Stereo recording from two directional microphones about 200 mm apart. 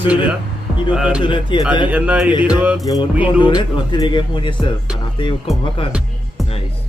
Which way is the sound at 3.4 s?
25° left (ahead or behind).